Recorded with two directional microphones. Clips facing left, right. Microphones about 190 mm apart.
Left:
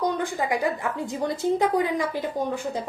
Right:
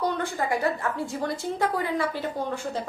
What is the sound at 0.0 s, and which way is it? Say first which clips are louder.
A woman's voice: left 2 dB; 15° left (ahead or behind).